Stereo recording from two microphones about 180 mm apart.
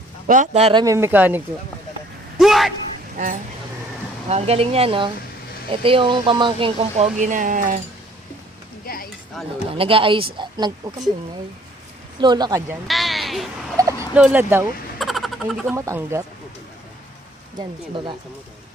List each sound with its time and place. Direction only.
0.3 s a man's voice: 40° right (ahead or behind); by 1.4 s 10° right (ahead or behind)
2.4 s a sound: centre (ahead or behind)
3.2 s speech: 45° right (ahead or behind)
4.3 s speech: 35° right (ahead or behind)
9.7 s a man's voice: 30° right (ahead or behind)
12.2 s a man's voice: 25° right (ahead or behind)
12.9 s speech: centre (ahead or behind)
13.7 s turkey: 20° right (ahead or behind)
14.1 s speech: 5° right (ahead or behind)
14.9 s a sound: centre (ahead or behind)
15.7 s speech: 15° right (ahead or behind)